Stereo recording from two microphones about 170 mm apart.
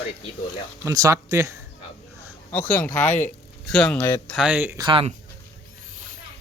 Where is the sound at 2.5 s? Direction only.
10° left (ahead or behind).